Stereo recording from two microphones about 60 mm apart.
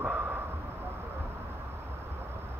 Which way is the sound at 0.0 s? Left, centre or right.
Right.